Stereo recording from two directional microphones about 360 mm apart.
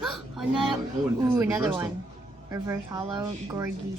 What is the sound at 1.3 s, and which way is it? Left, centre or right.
Speech, centre.